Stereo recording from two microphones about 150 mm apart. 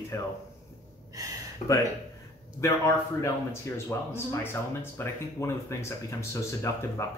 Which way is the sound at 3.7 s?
15° left (ahead or behind).